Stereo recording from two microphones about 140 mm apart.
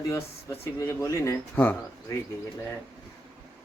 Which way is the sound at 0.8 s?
20° left (ahead or behind).